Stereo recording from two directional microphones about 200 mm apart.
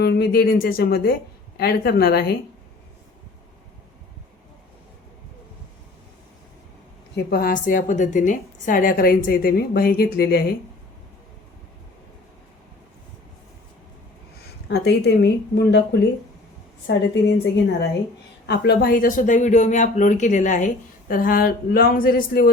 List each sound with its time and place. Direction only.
0.0 s speech: 55° left (ahead or behind)
7.3 s speech: 45° left (ahead or behind)
14.7 s a woman's voice: 55° left (ahead or behind)